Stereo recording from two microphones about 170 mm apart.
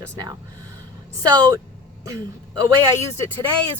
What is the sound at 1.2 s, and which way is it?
Speech, 25° right (ahead or behind).